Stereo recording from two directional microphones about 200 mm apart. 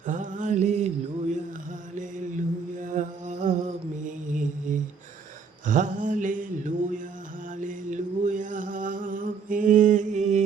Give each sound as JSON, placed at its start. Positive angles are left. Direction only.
{"t": 0.0, "sound": "mantra", "side_deg": -40}
{"t": 2.7, "sound": "music", "side_deg": -40}
{"t": 5.6, "sound": "a sound", "side_deg": -40}
{"t": 7.6, "sound": "mantra", "side_deg": -40}